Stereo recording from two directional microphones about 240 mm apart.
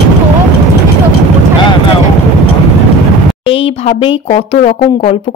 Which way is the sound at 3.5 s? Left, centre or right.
Left.